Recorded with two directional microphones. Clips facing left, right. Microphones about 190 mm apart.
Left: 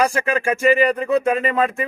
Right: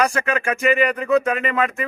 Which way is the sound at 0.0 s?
30° left (ahead or behind).